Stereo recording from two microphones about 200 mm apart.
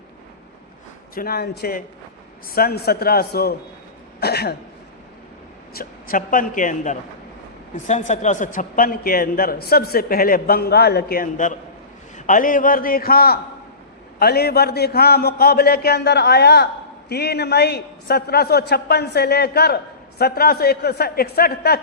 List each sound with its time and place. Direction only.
1.1 s a man's voice: 50° left (ahead or behind)
5.7 s a man's voice: 45° left (ahead or behind)